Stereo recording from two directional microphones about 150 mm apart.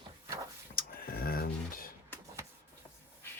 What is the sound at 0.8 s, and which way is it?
Speech, 75° left (ahead or behind).